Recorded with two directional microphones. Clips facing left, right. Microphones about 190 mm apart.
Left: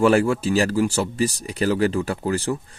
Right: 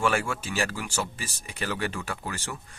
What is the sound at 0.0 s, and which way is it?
Speech, 35° left (ahead or behind).